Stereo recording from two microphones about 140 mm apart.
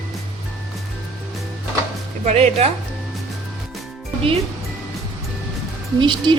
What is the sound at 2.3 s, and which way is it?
Speech, 50° right (ahead or behind).